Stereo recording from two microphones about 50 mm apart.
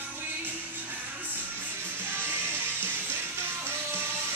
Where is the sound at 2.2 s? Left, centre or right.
Right.